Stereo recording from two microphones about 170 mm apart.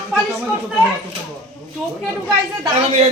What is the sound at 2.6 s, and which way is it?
Speech, 35° right (ahead or behind).